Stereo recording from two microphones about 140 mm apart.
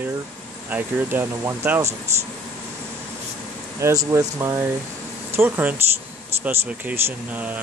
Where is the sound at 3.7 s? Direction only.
20° right (ahead or behind).